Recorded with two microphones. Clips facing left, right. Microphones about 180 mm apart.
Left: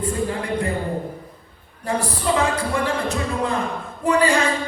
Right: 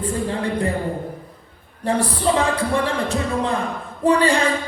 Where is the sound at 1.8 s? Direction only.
30° right (ahead or behind).